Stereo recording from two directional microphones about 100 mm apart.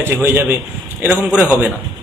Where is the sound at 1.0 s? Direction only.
15° right (ahead or behind).